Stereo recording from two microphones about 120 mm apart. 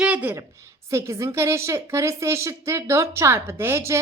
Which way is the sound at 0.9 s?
25° right (ahead or behind).